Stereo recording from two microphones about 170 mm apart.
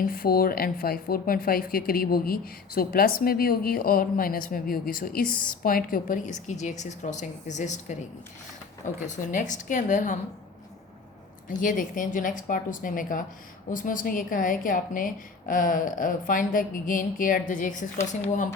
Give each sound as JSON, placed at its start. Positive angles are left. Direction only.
{"t": 0.0, "sound": "a woman's voice", "side_deg": 60}
{"t": 9.0, "sound": "a woman's voice", "side_deg": 45}
{"t": 11.4, "sound": "a woman's voice", "side_deg": 50}